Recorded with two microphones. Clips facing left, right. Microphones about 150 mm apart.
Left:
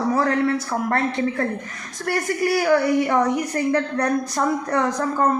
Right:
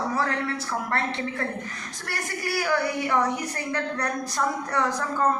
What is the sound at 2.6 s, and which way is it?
Speech, 45° left (ahead or behind).